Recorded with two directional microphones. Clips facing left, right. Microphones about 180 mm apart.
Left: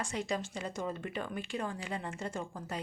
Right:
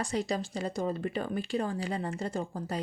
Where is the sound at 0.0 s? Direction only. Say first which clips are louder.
Right 4 dB; 35° right (ahead or behind).